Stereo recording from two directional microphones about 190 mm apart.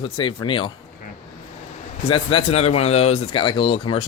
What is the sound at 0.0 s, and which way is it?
Speech, 25° left (ahead or behind).